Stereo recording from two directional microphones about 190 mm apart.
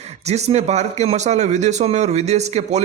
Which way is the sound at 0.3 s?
35° right (ahead or behind).